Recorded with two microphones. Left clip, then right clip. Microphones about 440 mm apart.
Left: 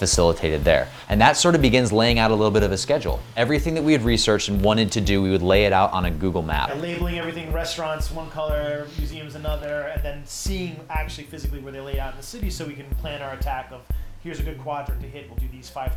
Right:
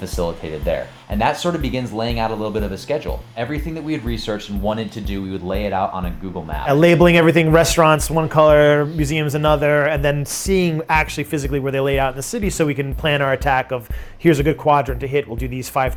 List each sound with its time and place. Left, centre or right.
0.0 s speech: left
6.8 s speech: right